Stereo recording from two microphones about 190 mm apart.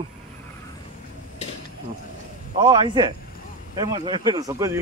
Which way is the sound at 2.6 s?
25° right (ahead or behind).